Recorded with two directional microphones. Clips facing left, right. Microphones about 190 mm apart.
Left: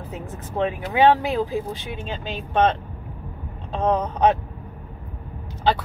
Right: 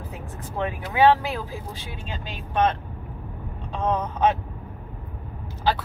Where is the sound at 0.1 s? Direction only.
20° left (ahead or behind).